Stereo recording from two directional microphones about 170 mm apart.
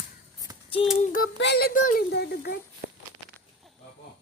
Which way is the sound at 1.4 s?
80° left.